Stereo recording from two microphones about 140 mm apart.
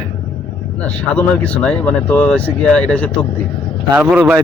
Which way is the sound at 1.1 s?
10° left (ahead or behind).